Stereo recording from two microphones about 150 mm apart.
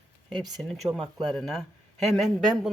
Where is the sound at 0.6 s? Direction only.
5° left (ahead or behind).